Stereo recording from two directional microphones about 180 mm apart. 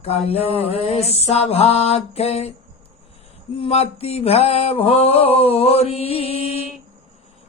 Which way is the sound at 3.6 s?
35° left (ahead or behind).